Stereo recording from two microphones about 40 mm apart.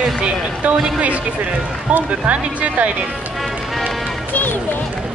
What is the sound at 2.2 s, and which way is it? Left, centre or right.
Speech, right.